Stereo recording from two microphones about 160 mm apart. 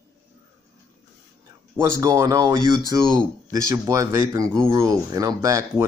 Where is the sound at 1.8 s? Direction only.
20° right (ahead or behind).